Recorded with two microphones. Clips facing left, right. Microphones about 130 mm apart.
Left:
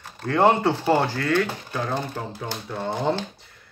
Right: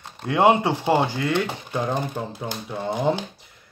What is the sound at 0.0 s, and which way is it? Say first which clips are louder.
Speech: right 1 dB; 15° right (ahead or behind).